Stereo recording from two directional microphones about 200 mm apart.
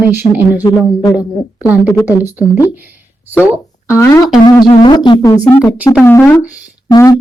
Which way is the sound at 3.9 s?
15° left (ahead or behind).